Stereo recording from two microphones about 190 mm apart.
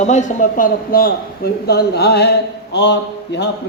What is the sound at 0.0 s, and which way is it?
A man's voice, 40° left (ahead or behind).